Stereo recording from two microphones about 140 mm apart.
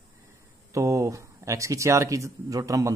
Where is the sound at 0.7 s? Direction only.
20° right (ahead or behind).